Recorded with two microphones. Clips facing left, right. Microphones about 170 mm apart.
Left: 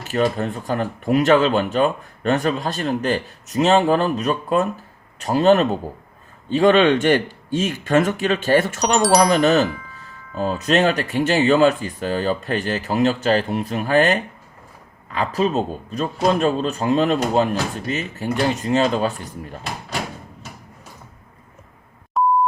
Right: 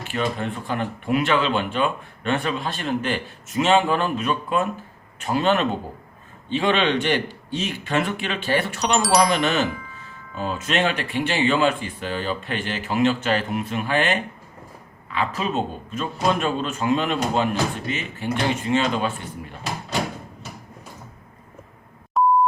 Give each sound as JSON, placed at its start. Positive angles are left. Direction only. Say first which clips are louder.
{"t": 0.0, "sound": "speech", "louder": "left 5 dB", "side_deg": 40}
{"t": 9.0, "sound": "speech", "louder": "left 3 dB", "side_deg": 0}
{"t": 9.3, "sound": "speech", "louder": "left 6 dB", "side_deg": 40}
{"t": 9.6, "sound": "speech", "louder": "left 1 dB", "side_deg": 0}
{"t": 10.3, "sound": "speech", "louder": "left 5 dB", "side_deg": 40}
{"t": 22.2, "sound": "beep", "louder": "even", "side_deg": 0}